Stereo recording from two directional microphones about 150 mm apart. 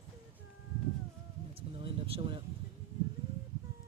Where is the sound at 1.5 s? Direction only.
40° right (ahead or behind).